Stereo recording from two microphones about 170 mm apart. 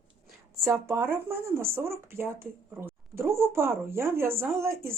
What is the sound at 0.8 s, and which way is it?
Speech, 15° right (ahead or behind).